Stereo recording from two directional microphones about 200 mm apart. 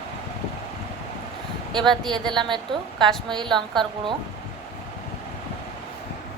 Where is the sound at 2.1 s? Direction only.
20° right (ahead or behind).